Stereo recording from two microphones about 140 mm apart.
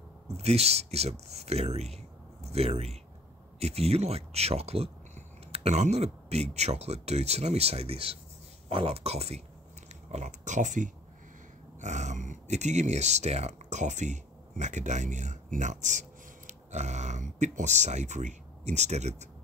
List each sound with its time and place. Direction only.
0.4 s speech: 50° right (ahead or behind)